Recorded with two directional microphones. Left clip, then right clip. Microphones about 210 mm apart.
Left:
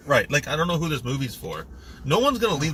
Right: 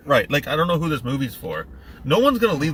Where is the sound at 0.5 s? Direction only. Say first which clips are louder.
Right 4 dB; 20° right (ahead or behind).